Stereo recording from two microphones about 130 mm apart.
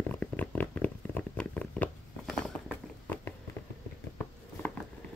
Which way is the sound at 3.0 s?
15° left (ahead or behind).